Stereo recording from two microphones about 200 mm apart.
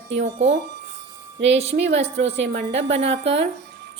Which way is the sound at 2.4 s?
55° right (ahead or behind).